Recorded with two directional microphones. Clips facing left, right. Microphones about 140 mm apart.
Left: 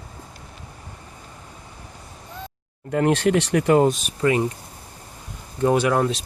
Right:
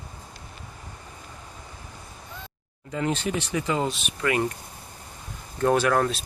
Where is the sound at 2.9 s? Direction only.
70° left (ahead or behind); by 4.1 s 45° left (ahead or behind).